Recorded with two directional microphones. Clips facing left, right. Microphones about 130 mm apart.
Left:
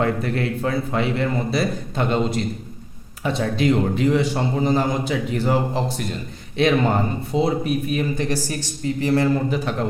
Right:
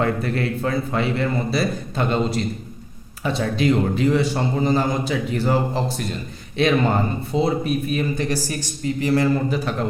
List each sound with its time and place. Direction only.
0.0 s a man's voice: 20° left (ahead or behind)